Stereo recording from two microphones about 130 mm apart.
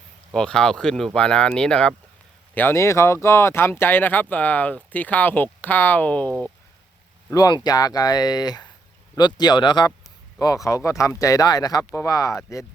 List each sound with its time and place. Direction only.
0.3 s speech: 5° left (ahead or behind)
2.6 s speech: 20° left (ahead or behind)
7.3 s speech: 25° left (ahead or behind)